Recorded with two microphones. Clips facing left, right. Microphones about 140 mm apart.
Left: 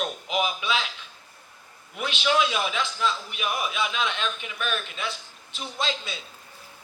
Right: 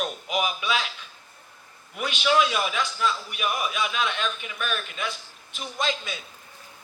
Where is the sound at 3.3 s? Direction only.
45° right (ahead or behind).